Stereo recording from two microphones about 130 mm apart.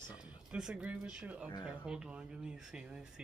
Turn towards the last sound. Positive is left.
turn(degrees=-5)  # may be behind; listen again after turning